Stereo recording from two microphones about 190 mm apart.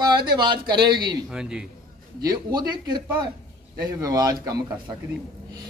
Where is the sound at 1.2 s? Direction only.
5° right (ahead or behind).